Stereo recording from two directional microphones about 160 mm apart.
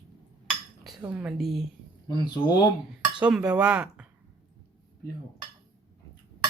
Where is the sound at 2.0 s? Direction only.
25° left (ahead or behind).